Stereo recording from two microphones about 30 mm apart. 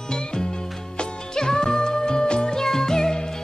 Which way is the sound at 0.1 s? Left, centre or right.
Left.